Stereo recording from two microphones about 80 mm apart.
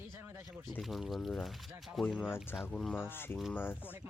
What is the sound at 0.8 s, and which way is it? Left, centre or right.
Speech, centre.